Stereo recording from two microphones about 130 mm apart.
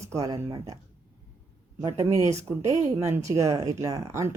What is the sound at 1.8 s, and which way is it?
Speech, 25° right (ahead or behind).